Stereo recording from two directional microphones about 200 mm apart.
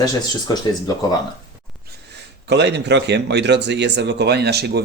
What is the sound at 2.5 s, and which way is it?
Speech, 60° right (ahead or behind).